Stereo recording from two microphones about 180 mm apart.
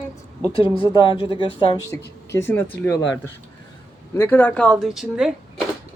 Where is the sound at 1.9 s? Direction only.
15° left (ahead or behind); by 5.3 s centre (ahead or behind).